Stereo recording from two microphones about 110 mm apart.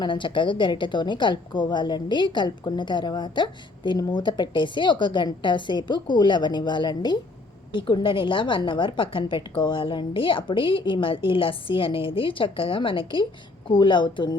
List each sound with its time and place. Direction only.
0.0 s a woman's voice: 50° left (ahead or behind)